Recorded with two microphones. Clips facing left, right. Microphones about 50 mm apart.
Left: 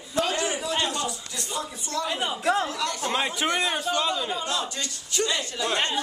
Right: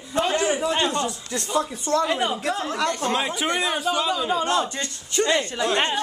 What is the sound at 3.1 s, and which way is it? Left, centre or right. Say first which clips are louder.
A man's voice: right 2 dB; centre.